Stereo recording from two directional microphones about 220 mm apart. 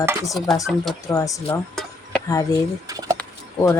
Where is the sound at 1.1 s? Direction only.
15° left (ahead or behind).